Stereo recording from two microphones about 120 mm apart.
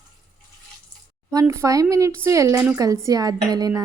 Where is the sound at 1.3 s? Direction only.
25° right (ahead or behind).